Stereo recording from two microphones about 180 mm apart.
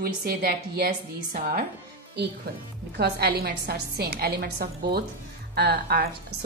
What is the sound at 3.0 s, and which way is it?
A woman's voice, 60° right (ahead or behind).